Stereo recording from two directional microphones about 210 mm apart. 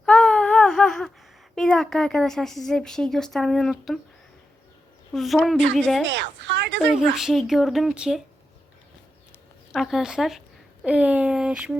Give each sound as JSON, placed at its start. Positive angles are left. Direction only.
{"t": 0.0, "sound": "a sound", "side_deg": 5}
{"t": 1.5, "sound": "speech", "side_deg": 0}
{"t": 5.1, "sound": "speech", "side_deg": 0}
{"t": 6.4, "sound": "a woman's voice", "side_deg": -60}
{"t": 7.2, "sound": "speech", "side_deg": 0}
{"t": 9.7, "sound": "speech", "side_deg": 0}